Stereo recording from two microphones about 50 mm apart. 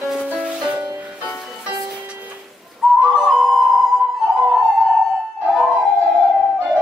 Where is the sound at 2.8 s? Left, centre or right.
Centre.